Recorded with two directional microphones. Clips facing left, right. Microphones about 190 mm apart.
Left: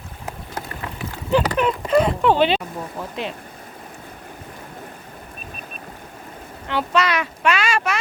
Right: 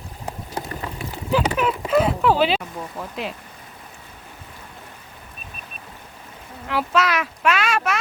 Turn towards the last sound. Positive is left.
turn(degrees=0)  # may be behind; listen again after turning